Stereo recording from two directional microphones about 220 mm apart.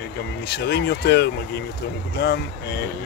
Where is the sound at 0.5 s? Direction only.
50° left (ahead or behind).